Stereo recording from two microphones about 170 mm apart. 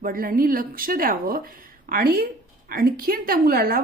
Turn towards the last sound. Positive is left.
turn(degrees=-60)  # may be behind; listen again after turning